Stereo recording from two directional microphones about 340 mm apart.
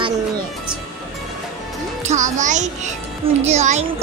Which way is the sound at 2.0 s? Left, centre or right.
Right.